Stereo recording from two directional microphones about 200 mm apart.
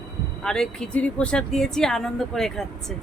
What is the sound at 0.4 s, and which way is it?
Speech, 5° left (ahead or behind).